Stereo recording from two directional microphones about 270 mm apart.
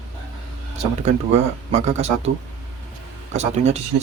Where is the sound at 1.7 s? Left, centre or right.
Right.